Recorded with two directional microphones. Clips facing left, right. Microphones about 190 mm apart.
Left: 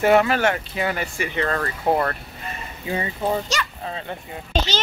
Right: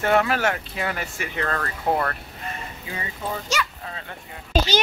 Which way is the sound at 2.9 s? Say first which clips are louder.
Left 8 dB; 30° left (ahead or behind).